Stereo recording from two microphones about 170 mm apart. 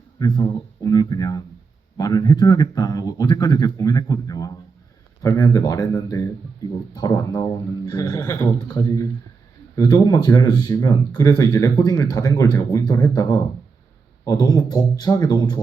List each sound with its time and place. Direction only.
0.2 s speech: 25° left (ahead or behind)